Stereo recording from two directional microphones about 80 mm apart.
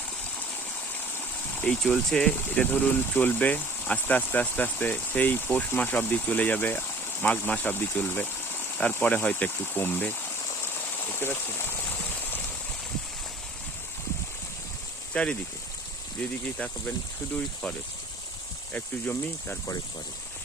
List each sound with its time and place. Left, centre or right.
0.9 s a sound: left
1.8 s speech: centre
2.3 s speech: left
10.6 s a sound: left
15.1 s speech: centre
18.7 s speech: left